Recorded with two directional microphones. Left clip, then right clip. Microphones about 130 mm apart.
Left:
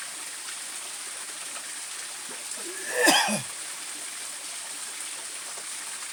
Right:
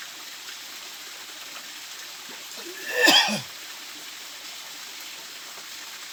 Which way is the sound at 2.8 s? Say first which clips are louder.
Right 3 dB; 15° left (ahead or behind).